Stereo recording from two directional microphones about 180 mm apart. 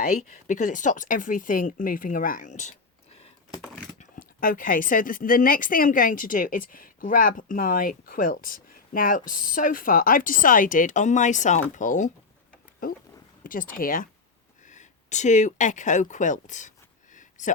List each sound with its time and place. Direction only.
0.0 s a woman's voice: 40° left (ahead or behind)
3.9 s a woman's voice: 50° left (ahead or behind)
13.4 s a woman's voice: 50° left (ahead or behind)
14.6 s a sound: 40° left (ahead or behind)